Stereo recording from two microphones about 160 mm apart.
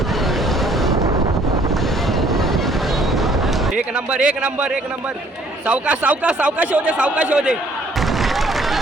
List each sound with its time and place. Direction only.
0.6 s boat: centre (ahead or behind)
0.9 s wind noise: 20° right (ahead or behind)
2.2 s vehicle: centre (ahead or behind)
3.8 s a man's voice: 10° right (ahead or behind)
8.2 s a sound: centre (ahead or behind)